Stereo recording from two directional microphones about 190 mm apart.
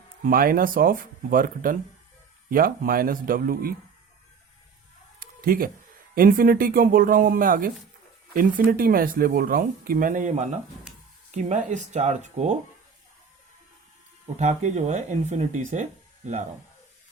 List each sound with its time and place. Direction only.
0.3 s speech: 50° right (ahead or behind)
5.2 s cat: 50° right (ahead or behind)
6.1 s speech: 50° right (ahead or behind)
14.3 s speech: 40° right (ahead or behind)